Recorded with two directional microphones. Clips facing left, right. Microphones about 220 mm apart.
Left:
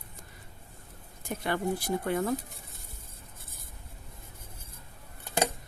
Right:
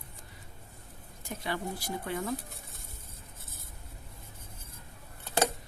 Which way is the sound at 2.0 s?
55° left (ahead or behind).